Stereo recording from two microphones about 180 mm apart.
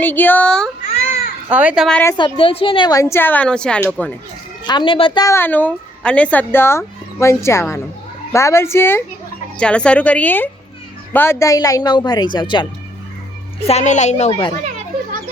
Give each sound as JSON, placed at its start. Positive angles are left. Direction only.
{"t": 0.0, "sound": "a woman's voice", "side_deg": 10}
{"t": 1.5, "sound": "a child's voice", "side_deg": -10}
{"t": 2.1, "sound": "a woman's voice", "side_deg": 30}
{"t": 4.6, "sound": "a woman's voice", "side_deg": 25}
{"t": 13.7, "sound": "a woman's voice", "side_deg": 40}